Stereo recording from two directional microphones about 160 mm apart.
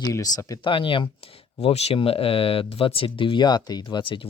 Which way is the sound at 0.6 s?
30° left (ahead or behind).